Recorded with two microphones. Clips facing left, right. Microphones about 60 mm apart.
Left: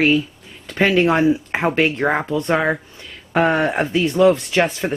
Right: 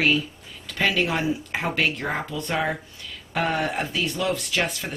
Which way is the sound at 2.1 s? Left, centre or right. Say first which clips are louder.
Left 9 dB; left.